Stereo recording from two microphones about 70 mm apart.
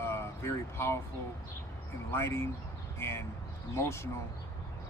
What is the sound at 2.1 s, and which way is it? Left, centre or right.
Speech, left.